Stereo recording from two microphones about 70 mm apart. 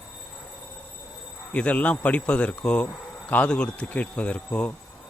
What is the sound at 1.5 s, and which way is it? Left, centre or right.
A man's voice, centre.